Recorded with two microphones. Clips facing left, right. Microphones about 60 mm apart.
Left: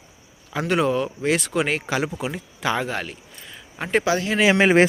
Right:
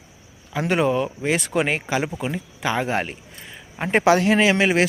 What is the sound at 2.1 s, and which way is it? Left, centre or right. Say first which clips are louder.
Speech: right 1 dB; centre.